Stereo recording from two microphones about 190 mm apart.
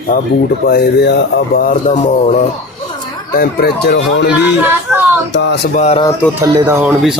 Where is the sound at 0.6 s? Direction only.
60° left (ahead or behind); by 2.4 s 40° left (ahead or behind).